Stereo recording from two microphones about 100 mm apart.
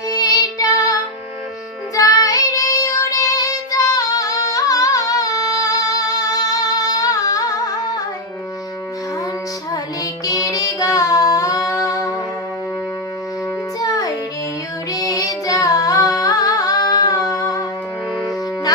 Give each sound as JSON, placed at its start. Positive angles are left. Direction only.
{"t": 0.1, "sound": "music", "side_deg": 35}
{"t": 2.0, "sound": "child singing", "side_deg": 35}
{"t": 9.7, "sound": "music", "side_deg": 35}
{"t": 13.7, "sound": "music", "side_deg": 35}
{"t": 14.9, "sound": "singing", "side_deg": 35}